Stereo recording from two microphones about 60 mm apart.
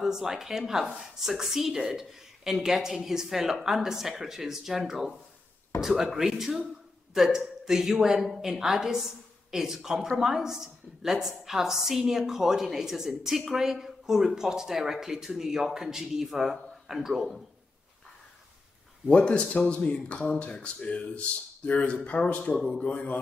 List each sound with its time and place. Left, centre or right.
0.0 s speech: centre
19.0 s speech: centre